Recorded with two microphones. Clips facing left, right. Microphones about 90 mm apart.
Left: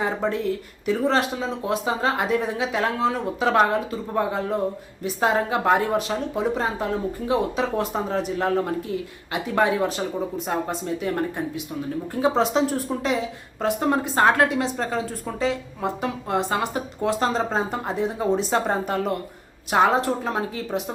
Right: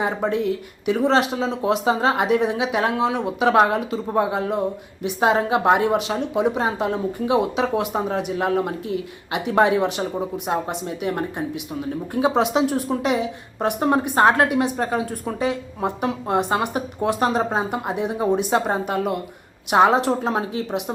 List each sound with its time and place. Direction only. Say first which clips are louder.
0.0 s a woman's voice: right 2 dB; 15° right (ahead or behind)